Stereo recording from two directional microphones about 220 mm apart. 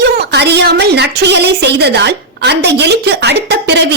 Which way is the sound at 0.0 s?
50° right (ahead or behind).